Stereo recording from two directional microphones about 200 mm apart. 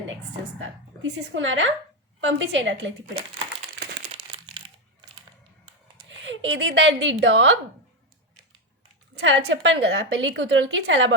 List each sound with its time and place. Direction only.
1.3 s a woman's voice: 70° right (ahead or behind)
4.1 s crumpling: 25° right (ahead or behind)
6.1 s speech: 70° right (ahead or behind)
9.1 s a woman's voice: 65° right (ahead or behind)